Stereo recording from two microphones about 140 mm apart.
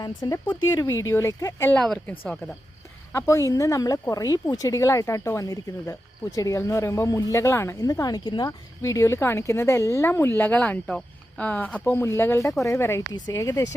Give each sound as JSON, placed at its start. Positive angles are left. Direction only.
{"t": 0.0, "sound": "speech", "side_deg": 25}
{"t": 1.7, "sound": "a woman's voice", "side_deg": 5}
{"t": 3.1, "sound": "speech", "side_deg": 20}